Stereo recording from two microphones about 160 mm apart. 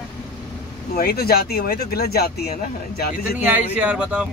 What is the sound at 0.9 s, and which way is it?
Speech, 75° left (ahead or behind).